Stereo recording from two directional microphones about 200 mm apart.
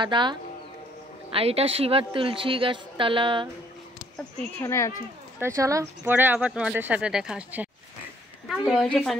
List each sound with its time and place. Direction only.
0.0 s a woman's voice: 25° right (ahead or behind)
4.2 s speech: 10° left (ahead or behind)
5.4 s a woman's voice: 15° right (ahead or behind); by 9.1 s 5° left (ahead or behind)